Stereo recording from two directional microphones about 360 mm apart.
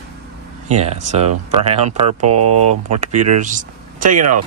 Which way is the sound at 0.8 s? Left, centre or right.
Centre.